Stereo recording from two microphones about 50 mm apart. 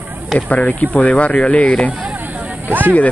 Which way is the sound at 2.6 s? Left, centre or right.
Right.